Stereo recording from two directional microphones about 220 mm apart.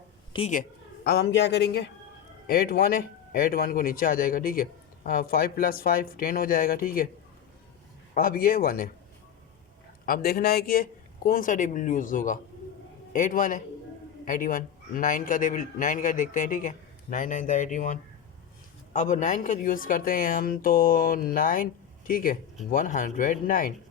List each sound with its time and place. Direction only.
0.3 s speech: 30° left (ahead or behind)
1.0 s a man's voice: 50° left (ahead or behind)
8.1 s a man's voice: 40° left (ahead or behind)
10.1 s a man's voice: 45° left (ahead or behind)